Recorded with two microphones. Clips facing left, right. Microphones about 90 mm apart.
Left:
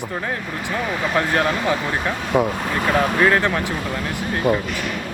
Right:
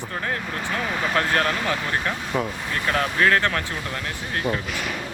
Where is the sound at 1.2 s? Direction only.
15° left (ahead or behind).